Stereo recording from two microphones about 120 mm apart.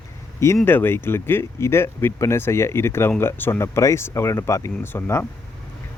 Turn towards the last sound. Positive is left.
turn(degrees=20)  # may be behind; listen again after turning